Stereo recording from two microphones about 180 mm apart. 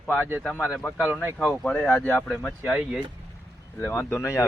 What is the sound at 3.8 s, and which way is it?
Speech, 10° left (ahead or behind).